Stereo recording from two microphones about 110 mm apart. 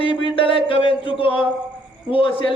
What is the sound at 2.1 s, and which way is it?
Speech, 55° left (ahead or behind).